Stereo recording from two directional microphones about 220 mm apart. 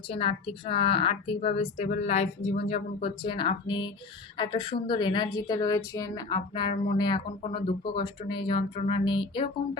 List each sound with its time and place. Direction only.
0.1 s a woman's voice: 25° left (ahead or behind)